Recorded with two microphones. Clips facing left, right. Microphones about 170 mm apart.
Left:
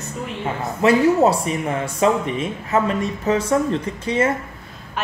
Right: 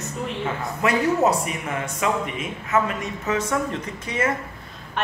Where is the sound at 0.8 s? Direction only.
30° left (ahead or behind).